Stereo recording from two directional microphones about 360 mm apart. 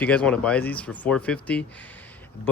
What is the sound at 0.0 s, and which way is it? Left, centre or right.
Speech, centre.